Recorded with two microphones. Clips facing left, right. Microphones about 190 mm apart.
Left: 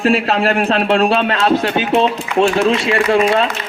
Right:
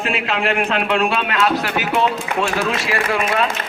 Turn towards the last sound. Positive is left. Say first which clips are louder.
# left 6 dB
turn(degrees=30)  # may be behind; listen again after turning